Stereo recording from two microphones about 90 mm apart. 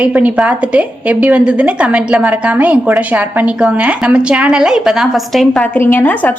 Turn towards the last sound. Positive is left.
turn(degrees=20)  # may be behind; listen again after turning